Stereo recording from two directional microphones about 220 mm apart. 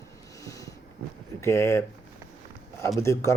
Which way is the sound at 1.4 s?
10° left (ahead or behind).